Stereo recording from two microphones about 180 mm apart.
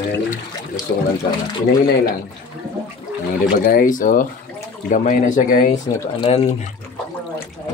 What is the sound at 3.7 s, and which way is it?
Speech, 50° left (ahead or behind).